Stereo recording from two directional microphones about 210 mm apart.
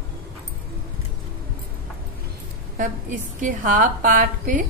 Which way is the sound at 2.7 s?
40° right (ahead or behind).